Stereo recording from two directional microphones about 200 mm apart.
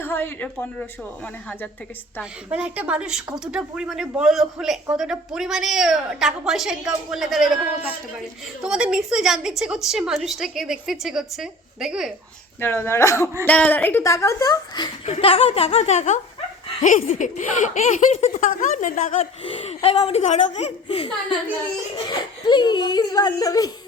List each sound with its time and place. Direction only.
0.0 s speech: 10° left (ahead or behind)
2.5 s a woman's voice: 5° right (ahead or behind)
12.5 s speech: 10° left (ahead or behind)
15.0 s a child's voice: 30° left (ahead or behind)
19.5 s speech: 30° left (ahead or behind)
22.4 s a child's voice: 20° left (ahead or behind)